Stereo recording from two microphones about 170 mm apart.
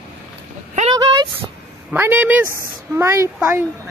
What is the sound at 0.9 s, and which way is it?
Speech, 25° right (ahead or behind).